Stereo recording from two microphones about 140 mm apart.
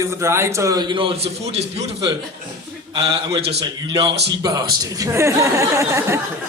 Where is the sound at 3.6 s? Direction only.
30° right (ahead or behind).